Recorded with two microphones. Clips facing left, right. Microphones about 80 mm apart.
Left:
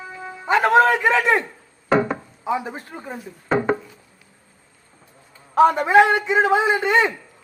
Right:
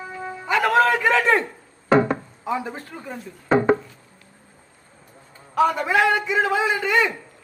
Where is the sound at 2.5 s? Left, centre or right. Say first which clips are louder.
Left 2 dB; centre.